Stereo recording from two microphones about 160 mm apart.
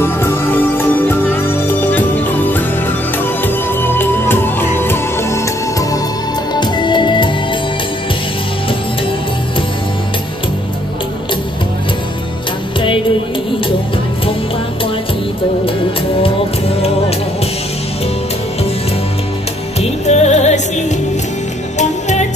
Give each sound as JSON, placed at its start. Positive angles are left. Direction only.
{"t": 0.0, "sound": "music", "side_deg": 15}
{"t": 2.5, "sound": "music", "side_deg": 10}
{"t": 19.8, "sound": "music", "side_deg": 45}